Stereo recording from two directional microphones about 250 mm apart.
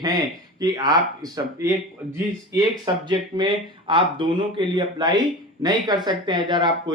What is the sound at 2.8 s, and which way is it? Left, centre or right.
Speech, centre.